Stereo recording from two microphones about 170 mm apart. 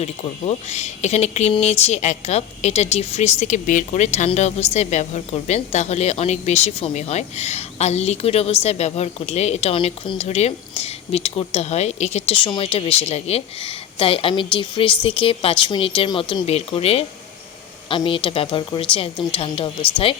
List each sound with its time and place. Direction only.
0.0 s speech: 40° left (ahead or behind)